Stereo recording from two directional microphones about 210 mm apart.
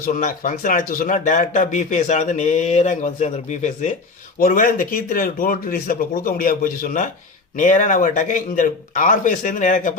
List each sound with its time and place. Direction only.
0.0 s speech: 40° left (ahead or behind)